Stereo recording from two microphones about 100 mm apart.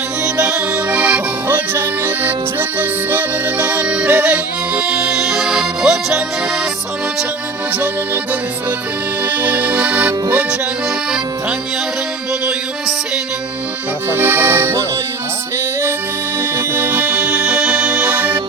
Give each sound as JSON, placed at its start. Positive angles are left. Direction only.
{"t": 0.3, "sound": "accordion", "side_deg": -10}
{"t": 7.7, "sound": "accordion", "side_deg": -15}
{"t": 14.1, "sound": "accordion", "side_deg": -20}
{"t": 15.5, "sound": "music", "side_deg": -25}
{"t": 16.4, "sound": "accordion", "side_deg": -25}